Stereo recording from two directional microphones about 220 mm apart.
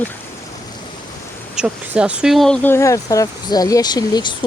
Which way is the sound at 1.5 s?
5° right (ahead or behind).